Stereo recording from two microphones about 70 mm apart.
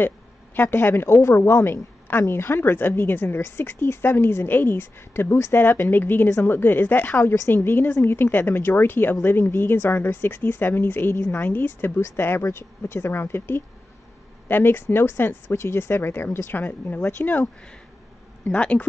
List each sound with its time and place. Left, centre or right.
0.6 s a woman's voice: left